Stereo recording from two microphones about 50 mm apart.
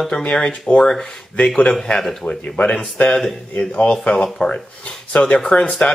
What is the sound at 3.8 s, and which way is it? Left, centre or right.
Speech, left.